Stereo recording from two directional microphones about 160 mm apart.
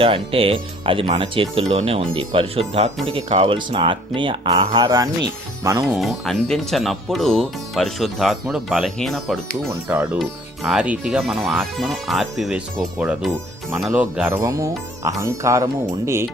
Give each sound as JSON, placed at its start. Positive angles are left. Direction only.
{"t": 0.0, "sound": "speech", "side_deg": -35}
{"t": 5.9, "sound": "speech", "side_deg": 0}
{"t": 9.6, "sound": "speech", "side_deg": -15}
{"t": 10.2, "sound": "speech", "side_deg": 0}
{"t": 14.3, "sound": "speech", "side_deg": -20}